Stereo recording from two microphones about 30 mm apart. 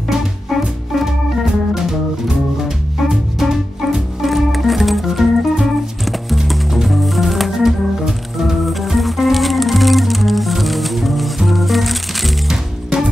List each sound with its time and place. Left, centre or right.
0.5 s music: centre
1.8 s music: centre
4.3 s organ: centre
6.9 s music: centre
7.6 s organ: centre
8.8 s music: centre
12.4 s music: right